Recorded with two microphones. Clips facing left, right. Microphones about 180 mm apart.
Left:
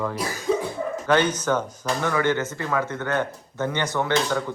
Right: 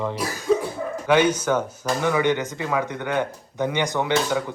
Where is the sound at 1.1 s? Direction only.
10° right (ahead or behind).